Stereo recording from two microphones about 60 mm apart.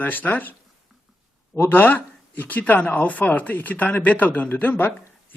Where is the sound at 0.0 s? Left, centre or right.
Left.